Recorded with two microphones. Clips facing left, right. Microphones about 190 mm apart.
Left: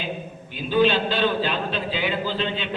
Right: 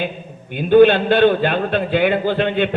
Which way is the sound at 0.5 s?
55° right (ahead or behind).